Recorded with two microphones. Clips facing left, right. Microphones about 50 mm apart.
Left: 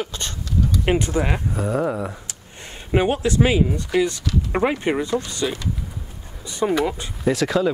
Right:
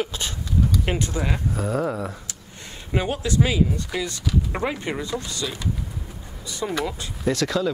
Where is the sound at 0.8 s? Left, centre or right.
Left.